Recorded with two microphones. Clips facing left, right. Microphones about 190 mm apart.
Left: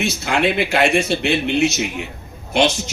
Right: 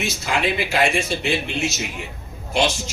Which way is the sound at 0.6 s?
65° left (ahead or behind).